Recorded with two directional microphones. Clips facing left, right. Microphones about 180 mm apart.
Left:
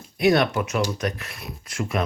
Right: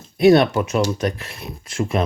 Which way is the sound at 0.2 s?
30° right (ahead or behind).